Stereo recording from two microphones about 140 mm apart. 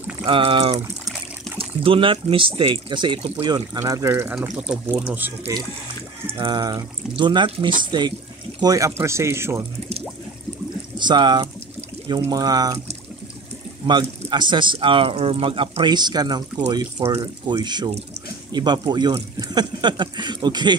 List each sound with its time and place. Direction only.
0.2 s speech: 40° right (ahead or behind); by 4.7 s 5° right (ahead or behind)
5.5 s speech: 25° right (ahead or behind)
11.0 s speech: 30° right (ahead or behind)
13.8 s speech: 35° right (ahead or behind)